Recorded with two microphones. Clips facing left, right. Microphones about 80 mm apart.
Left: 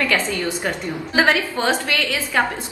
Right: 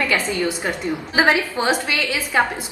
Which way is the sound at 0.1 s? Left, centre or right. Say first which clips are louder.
Even; centre.